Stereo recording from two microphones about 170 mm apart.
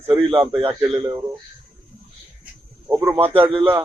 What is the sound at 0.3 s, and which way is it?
Speech, 30° right (ahead or behind).